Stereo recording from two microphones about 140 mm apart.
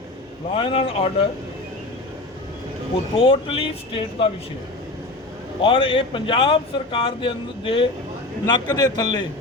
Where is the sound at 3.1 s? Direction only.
40° left (ahead or behind).